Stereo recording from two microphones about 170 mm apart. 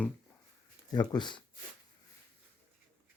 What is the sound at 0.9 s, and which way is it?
Speech, 25° left (ahead or behind).